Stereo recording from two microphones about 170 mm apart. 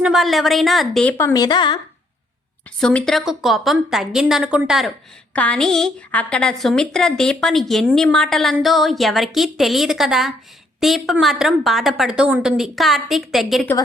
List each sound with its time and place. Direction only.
0.0 s a woman's voice: centre (ahead or behind)
1.1 s speech: 20° left (ahead or behind)
2.8 s a woman's voice: 5° left (ahead or behind)
5.3 s a woman's voice: 5° left (ahead or behind)